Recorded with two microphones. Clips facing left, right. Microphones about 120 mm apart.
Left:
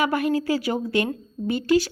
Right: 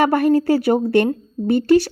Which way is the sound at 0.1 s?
55° right (ahead or behind).